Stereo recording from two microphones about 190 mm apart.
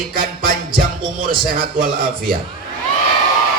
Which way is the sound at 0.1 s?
50° right (ahead or behind).